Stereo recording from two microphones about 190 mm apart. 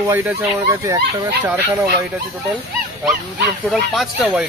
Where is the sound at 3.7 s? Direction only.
5° right (ahead or behind).